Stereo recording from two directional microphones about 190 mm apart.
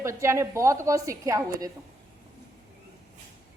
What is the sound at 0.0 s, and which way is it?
A woman's voice, 15° right (ahead or behind).